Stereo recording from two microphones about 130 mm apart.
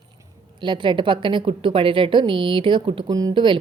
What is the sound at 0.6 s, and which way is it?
A woman's voice, 35° right (ahead or behind).